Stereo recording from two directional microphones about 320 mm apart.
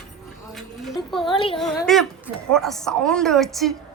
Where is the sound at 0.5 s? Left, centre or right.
Centre.